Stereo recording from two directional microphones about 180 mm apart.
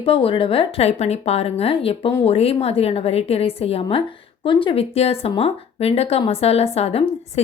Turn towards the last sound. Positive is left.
turn(degrees=35)  # may be behind; listen again after turning